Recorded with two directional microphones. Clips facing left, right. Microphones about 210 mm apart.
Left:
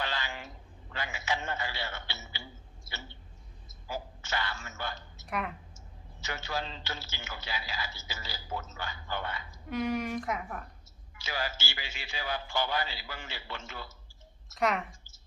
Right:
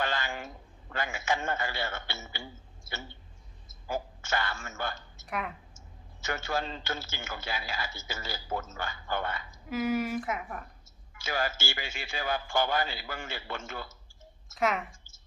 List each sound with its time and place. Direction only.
0.0 s a man's voice: 50° right (ahead or behind)
3.8 s a woman's voice: 50° right (ahead or behind)
5.2 s speech: centre (ahead or behind)
6.1 s a man's voice: 50° right (ahead or behind)
9.6 s a woman's voice: 5° right (ahead or behind)
11.1 s a man's voice: 50° right (ahead or behind)
14.5 s a woman's voice: centre (ahead or behind)